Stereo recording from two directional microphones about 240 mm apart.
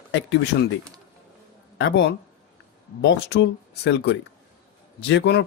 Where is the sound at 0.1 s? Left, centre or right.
Left.